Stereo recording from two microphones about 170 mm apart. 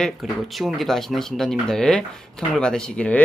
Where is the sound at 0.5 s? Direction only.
Centre (ahead or behind).